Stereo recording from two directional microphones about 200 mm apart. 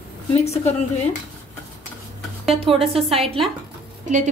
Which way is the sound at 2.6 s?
30° right (ahead or behind).